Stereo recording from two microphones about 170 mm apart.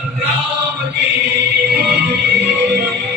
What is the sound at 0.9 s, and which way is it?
Music, 85° right.